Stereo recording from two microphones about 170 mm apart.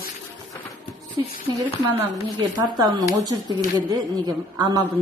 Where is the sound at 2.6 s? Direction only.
25° right (ahead or behind).